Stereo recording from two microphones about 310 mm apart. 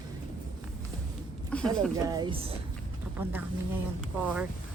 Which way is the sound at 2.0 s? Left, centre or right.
Centre.